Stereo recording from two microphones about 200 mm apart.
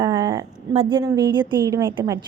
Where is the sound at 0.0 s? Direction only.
20° right (ahead or behind).